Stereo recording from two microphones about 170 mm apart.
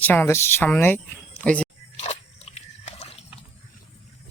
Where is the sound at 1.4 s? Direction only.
5° left (ahead or behind).